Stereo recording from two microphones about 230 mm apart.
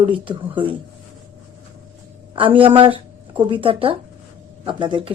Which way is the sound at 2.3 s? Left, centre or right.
Right.